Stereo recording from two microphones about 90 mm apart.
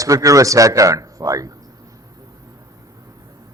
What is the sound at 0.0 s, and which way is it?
A man's voice, 40° right (ahead or behind).